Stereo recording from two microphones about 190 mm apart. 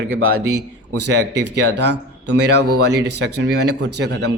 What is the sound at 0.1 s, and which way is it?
Speech, 90° right.